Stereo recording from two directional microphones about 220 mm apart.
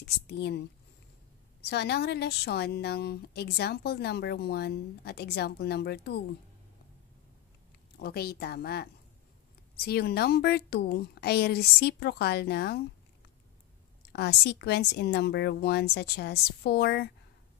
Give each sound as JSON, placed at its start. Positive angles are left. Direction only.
{"t": 0.0, "sound": "speech", "side_deg": 50}
{"t": 1.6, "sound": "a woman's voice", "side_deg": 50}
{"t": 8.0, "sound": "a woman's voice", "side_deg": 45}
{"t": 9.8, "sound": "a woman's voice", "side_deg": 45}
{"t": 14.1, "sound": "a woman's voice", "side_deg": 50}